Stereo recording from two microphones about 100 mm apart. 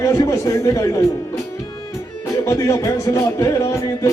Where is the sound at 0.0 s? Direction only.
35° left (ahead or behind).